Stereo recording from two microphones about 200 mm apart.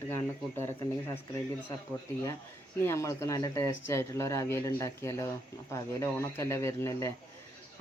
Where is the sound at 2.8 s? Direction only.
15° left (ahead or behind).